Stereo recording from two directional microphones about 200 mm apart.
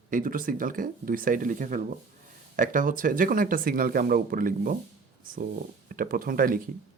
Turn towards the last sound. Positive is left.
turn(degrees=-45)  # may be behind; listen again after turning